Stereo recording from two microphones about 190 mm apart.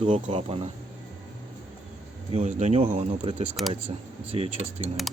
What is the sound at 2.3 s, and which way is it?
Speech, 35° right (ahead or behind).